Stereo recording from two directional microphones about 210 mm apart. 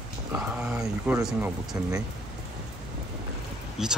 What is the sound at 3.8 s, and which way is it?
Speech, centre (ahead or behind).